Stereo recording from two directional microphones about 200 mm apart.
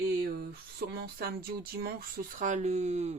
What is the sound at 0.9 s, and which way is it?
Speech, 50° right (ahead or behind).